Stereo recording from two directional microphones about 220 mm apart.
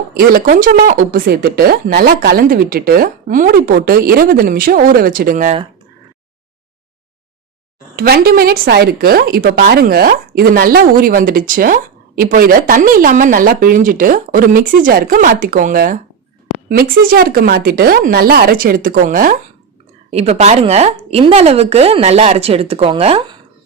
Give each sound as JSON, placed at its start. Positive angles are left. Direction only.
{"t": 0.1, "sound": "a woman's voice", "side_deg": -40}
{"t": 7.9, "sound": "a woman's voice", "side_deg": -45}